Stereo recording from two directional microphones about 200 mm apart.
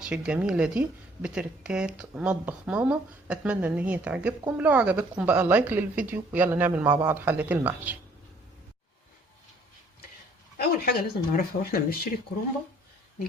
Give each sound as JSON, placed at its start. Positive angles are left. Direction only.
{"t": 0.0, "sound": "speech", "side_deg": -5}
{"t": 6.8, "sound": "a man's voice", "side_deg": -20}
{"t": 7.1, "sound": "speech", "side_deg": -10}
{"t": 10.6, "sound": "speech", "side_deg": 50}